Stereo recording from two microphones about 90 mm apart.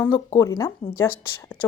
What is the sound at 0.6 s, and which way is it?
Speech, 25° left (ahead or behind).